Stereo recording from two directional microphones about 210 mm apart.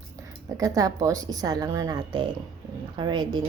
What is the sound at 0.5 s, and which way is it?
A woman's voice, 15° right (ahead or behind).